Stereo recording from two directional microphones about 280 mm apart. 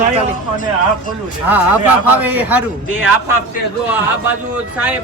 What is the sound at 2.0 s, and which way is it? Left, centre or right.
Speech, centre.